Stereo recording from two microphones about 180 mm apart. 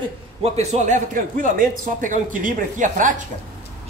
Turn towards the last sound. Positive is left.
turn(degrees=-45)  # may be behind; listen again after turning